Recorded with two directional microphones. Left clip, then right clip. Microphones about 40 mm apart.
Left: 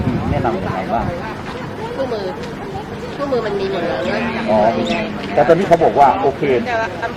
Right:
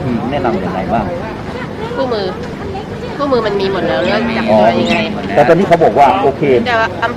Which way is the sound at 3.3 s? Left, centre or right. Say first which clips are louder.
Right 5 dB; right.